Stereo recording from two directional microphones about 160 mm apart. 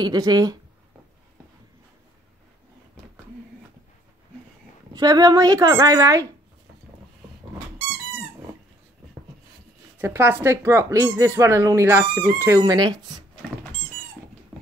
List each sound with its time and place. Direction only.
0.0 s speech: 25° right (ahead or behind)
4.9 s speech: 25° right (ahead or behind)
9.9 s speech: 15° right (ahead or behind)